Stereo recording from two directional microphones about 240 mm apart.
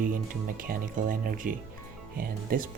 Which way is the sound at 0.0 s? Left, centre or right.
Right.